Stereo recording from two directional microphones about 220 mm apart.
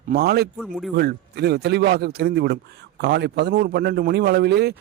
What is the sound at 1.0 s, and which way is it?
Speech, 45° right (ahead or behind).